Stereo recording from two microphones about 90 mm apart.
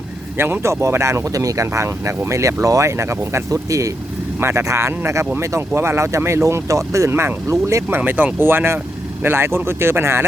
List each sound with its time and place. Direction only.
0.3 s speech: 25° right (ahead or behind)